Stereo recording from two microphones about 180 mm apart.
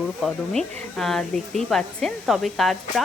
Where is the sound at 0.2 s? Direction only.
5° left (ahead or behind).